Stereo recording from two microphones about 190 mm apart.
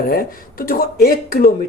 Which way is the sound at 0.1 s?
50° left (ahead or behind).